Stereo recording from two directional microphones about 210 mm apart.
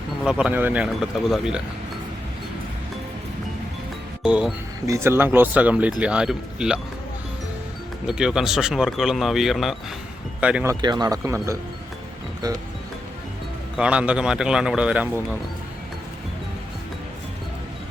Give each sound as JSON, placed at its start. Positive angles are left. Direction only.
{"t": 0.3, "sound": "speech", "side_deg": -5}
{"t": 4.2, "sound": "speech", "side_deg": -5}
{"t": 8.0, "sound": "speech", "side_deg": -5}
{"t": 13.7, "sound": "speech", "side_deg": -5}